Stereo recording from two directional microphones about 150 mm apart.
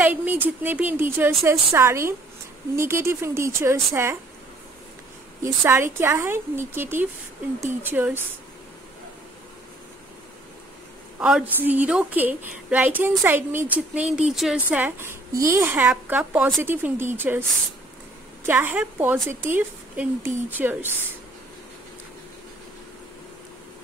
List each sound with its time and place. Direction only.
0.0 s a woman's voice: 10° right (ahead or behind)
5.4 s a woman's voice: 15° right (ahead or behind)
11.1 s a woman's voice: 5° right (ahead or behind)